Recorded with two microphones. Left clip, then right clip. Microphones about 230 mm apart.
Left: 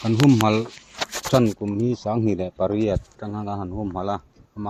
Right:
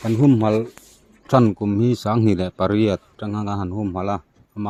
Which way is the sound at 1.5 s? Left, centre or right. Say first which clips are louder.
Right 4 dB; right.